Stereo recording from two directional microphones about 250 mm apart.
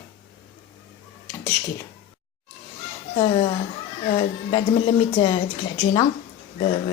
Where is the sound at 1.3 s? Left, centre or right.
Centre.